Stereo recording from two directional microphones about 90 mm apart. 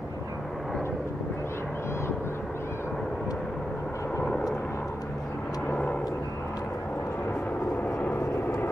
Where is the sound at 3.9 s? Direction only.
30° left (ahead or behind).